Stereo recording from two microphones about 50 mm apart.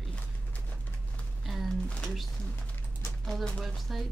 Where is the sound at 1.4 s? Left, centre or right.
Centre.